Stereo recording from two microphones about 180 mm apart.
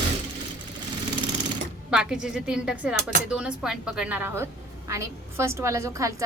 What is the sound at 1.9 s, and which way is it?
A woman's voice, 5° right (ahead or behind).